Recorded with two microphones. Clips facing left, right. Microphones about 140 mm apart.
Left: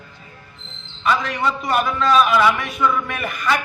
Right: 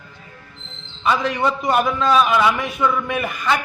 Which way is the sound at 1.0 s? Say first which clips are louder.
Right 2 dB; 20° right (ahead or behind).